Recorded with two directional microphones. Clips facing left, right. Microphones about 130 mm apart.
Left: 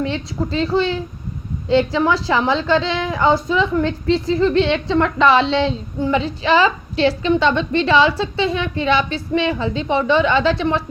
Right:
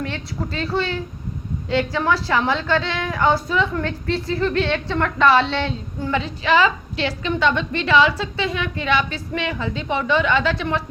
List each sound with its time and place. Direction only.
0.0 s a woman's voice: 20° left (ahead or behind)